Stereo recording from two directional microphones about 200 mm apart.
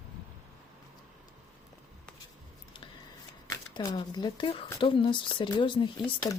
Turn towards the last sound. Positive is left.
turn(degrees=20)  # may be behind; listen again after turning